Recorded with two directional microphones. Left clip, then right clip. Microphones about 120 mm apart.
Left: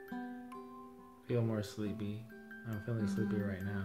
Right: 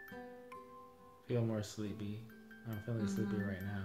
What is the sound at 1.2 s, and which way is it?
Music, 35° left (ahead or behind).